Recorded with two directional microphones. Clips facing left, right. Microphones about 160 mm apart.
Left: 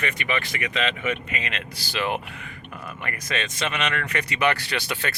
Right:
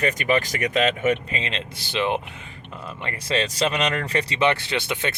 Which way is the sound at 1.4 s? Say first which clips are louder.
Right 2 dB; 25° right (ahead or behind).